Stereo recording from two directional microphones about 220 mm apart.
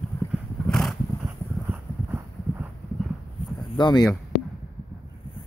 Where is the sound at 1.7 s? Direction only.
10° right (ahead or behind).